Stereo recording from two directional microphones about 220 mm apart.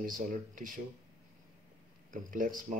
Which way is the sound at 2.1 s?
40° right (ahead or behind).